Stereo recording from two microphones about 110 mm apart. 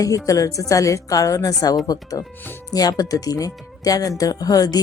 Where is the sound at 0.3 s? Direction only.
30° left (ahead or behind).